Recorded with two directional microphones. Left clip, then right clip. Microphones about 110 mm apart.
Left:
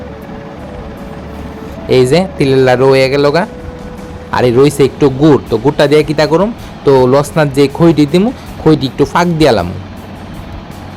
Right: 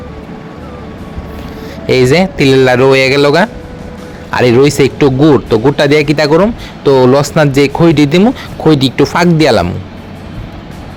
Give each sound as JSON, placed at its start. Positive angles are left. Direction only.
{"t": 1.9, "sound": "speech", "side_deg": -45}